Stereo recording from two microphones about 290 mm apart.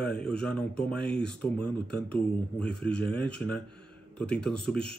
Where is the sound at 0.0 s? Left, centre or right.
Centre.